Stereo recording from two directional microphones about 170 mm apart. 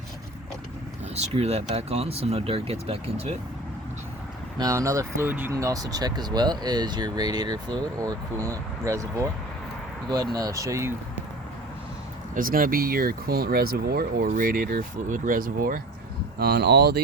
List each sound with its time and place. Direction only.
1.1 s speech: 40° right (ahead or behind)
4.5 s speech: 20° right (ahead or behind)
10.3 s speech: 20° right (ahead or behind)
12.3 s speech: 55° right (ahead or behind)
16.4 s speech: 70° right (ahead or behind)